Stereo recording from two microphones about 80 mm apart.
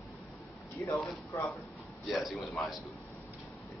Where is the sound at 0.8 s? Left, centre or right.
Left.